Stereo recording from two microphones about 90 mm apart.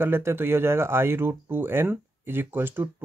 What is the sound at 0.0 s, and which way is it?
Speech, 25° right (ahead or behind).